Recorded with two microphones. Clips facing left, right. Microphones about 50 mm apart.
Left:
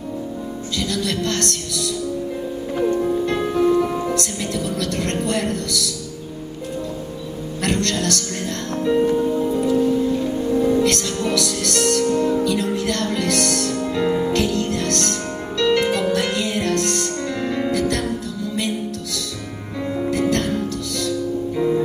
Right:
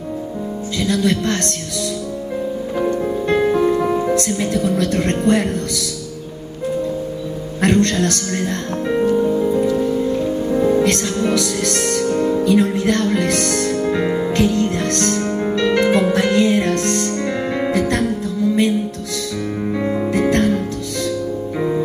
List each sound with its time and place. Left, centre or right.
0.7 s speech: right
2.9 s music: right
3.4 s music: centre
3.9 s speech: right
7.6 s speech: right
9.2 s music: right
19.8 s music: right